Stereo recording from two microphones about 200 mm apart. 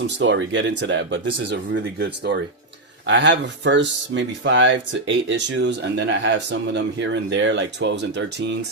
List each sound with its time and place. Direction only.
0.2 s speech: 65° right (ahead or behind)